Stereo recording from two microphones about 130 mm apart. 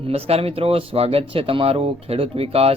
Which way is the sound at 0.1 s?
50° right (ahead or behind).